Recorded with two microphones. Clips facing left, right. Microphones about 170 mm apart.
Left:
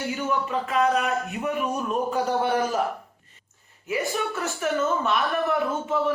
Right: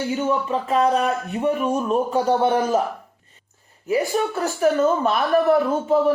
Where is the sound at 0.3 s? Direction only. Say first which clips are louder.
Right 5 dB; 30° right (ahead or behind).